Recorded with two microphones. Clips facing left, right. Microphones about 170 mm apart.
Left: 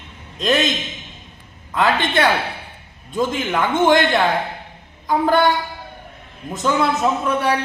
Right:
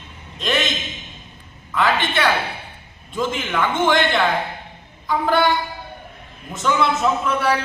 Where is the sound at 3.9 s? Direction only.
40° left (ahead or behind).